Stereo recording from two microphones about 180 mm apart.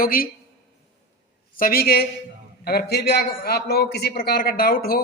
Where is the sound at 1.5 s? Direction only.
55° left (ahead or behind).